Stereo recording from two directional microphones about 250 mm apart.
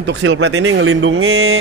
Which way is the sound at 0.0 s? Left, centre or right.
Right.